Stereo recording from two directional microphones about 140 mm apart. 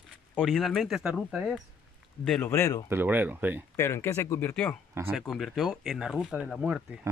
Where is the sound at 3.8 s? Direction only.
20° left (ahead or behind).